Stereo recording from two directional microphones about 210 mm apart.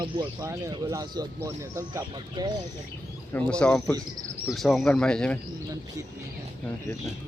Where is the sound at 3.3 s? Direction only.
5° left (ahead or behind).